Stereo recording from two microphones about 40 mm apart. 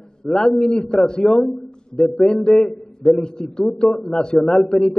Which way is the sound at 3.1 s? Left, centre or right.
Centre.